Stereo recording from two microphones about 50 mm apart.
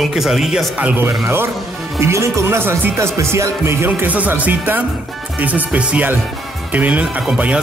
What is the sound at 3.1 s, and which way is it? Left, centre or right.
Speech, right.